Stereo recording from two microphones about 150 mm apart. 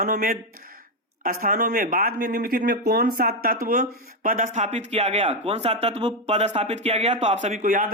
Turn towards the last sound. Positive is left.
turn(degrees=-65)  # may be behind; listen again after turning